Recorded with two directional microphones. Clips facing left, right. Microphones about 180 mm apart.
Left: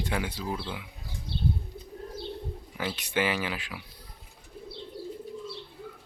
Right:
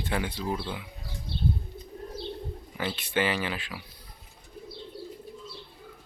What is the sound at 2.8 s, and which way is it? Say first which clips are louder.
Speech: right 1 dB; 10° left (ahead or behind).